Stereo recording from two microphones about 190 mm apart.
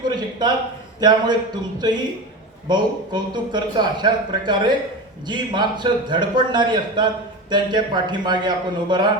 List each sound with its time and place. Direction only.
0.0 s a sound: 20° right (ahead or behind)
0.9 s a man's voice: 20° right (ahead or behind)
2.6 s a man's voice: 20° right (ahead or behind)